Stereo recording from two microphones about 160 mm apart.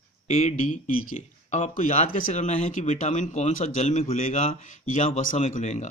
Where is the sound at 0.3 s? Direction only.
45° left (ahead or behind).